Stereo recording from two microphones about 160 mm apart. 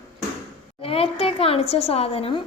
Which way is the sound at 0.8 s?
35° left (ahead or behind).